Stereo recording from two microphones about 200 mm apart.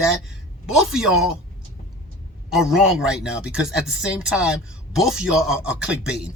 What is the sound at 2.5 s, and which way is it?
Speech, centre (ahead or behind).